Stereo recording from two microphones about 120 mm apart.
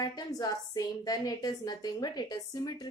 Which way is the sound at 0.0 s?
35° left (ahead or behind).